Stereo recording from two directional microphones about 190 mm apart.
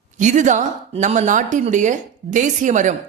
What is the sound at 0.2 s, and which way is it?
A woman's voice, 40° right (ahead or behind).